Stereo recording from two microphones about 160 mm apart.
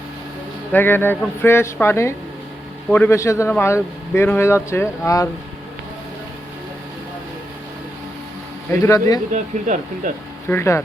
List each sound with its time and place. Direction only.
0.7 s speech: 15° left (ahead or behind)
8.8 s speech: 20° left (ahead or behind)
9.3 s speech: 50° right (ahead or behind)
10.5 s speech: 15° left (ahead or behind)